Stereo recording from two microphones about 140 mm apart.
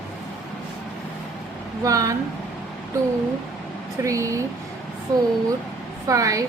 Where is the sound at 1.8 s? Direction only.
25° right (ahead or behind).